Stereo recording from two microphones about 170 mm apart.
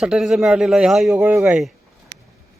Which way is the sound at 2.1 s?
90° right.